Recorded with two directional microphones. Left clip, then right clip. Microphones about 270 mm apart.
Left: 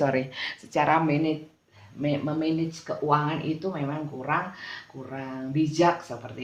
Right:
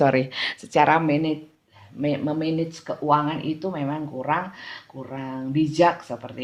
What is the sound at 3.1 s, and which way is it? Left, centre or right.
Speech, right.